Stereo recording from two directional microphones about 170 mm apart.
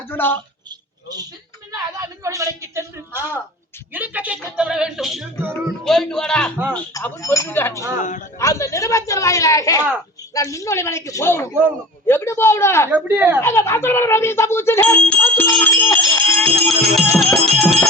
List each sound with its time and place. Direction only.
0.1 s speech: 10° left (ahead or behind)
1.7 s a woman's voice: 20° right (ahead or behind); by 5.2 s centre (ahead or behind)
5.4 s a woman's voice: 15° right (ahead or behind)
5.8 s a woman's voice: 5° left (ahead or behind)
6.9 s a man's voice: 15° left (ahead or behind)
12.9 s a woman's voice: 10° right (ahead or behind)
13.4 s speech: 15° left (ahead or behind)
15.6 s music: 10° left (ahead or behind)
17.6 s bell: 10° left (ahead or behind)